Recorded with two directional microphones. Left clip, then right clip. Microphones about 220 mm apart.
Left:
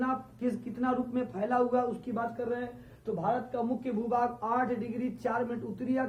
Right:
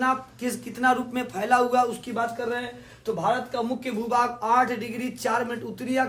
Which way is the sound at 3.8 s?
25° right (ahead or behind).